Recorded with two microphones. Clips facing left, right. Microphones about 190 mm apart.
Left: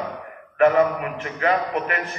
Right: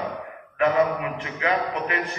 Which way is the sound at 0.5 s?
50° left (ahead or behind).